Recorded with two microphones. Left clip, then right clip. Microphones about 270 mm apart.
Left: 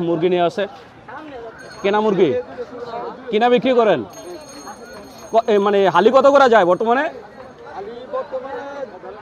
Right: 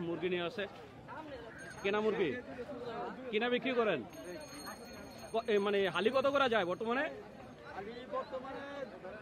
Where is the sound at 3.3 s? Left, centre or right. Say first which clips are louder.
Left 19 dB; left.